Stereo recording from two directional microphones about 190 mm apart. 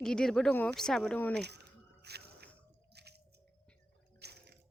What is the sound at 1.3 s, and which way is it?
Squish, 60° right (ahead or behind).